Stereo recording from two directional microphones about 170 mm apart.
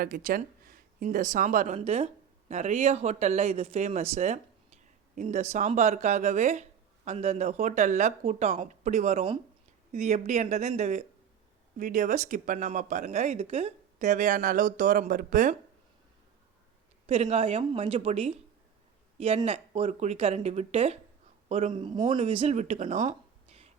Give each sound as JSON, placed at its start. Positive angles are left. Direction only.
{"t": 0.0, "sound": "speech", "side_deg": -55}
{"t": 17.1, "sound": "speech", "side_deg": -35}
{"t": 19.5, "sound": "speech", "side_deg": -35}
{"t": 21.7, "sound": "speech", "side_deg": -30}